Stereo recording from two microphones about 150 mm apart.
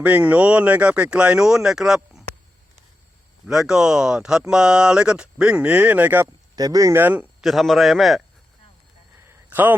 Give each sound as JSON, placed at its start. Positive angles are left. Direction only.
{"t": 0.0, "sound": "speech", "side_deg": -10}
{"t": 3.4, "sound": "speech", "side_deg": -5}
{"t": 6.6, "sound": "speech", "side_deg": -25}
{"t": 7.4, "sound": "speech", "side_deg": 0}
{"t": 9.2, "sound": "a sound", "side_deg": -15}